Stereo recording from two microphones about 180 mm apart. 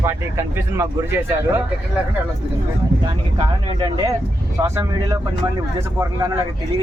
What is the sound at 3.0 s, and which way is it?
Speech, 25° right (ahead or behind).